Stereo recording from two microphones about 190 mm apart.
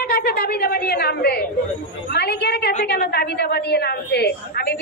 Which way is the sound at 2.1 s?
55° left (ahead or behind).